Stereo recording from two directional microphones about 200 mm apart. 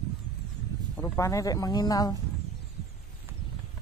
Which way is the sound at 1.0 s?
15° left (ahead or behind).